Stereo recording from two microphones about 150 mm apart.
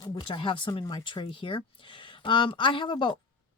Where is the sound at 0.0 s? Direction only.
35° left (ahead or behind).